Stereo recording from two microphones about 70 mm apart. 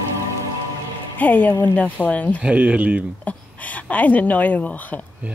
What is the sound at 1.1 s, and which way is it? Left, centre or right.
Speech, left.